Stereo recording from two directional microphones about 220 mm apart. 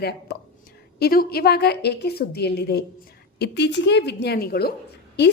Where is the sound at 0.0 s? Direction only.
45° left (ahead or behind).